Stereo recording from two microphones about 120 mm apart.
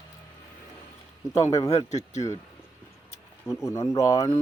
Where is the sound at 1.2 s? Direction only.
30° left (ahead or behind).